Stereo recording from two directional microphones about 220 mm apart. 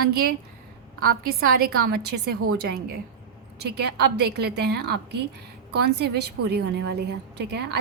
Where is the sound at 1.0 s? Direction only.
45° right (ahead or behind).